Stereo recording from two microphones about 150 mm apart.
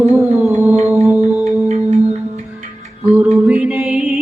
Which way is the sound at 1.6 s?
45° right (ahead or behind).